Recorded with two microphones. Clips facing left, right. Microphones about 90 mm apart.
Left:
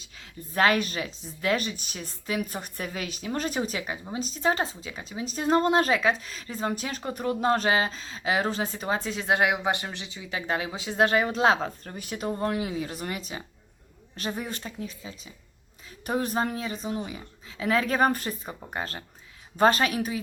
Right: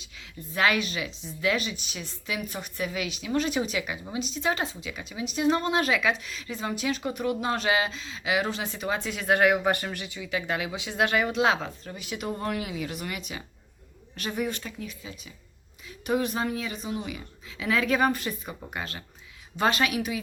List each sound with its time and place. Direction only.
0.0 s speech: 40° left (ahead or behind)
9.2 s speech: 20° left (ahead or behind); by 20.1 s 35° left (ahead or behind)